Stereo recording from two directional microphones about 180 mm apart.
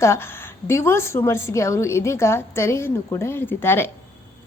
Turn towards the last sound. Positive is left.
turn(degrees=10)  # may be behind; listen again after turning